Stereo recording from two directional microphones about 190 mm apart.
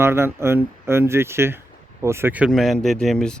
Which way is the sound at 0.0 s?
10° right (ahead or behind).